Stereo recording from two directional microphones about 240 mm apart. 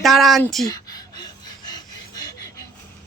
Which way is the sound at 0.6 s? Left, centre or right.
Centre.